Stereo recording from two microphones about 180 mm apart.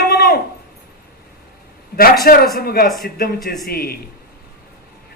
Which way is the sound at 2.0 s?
55° left (ahead or behind).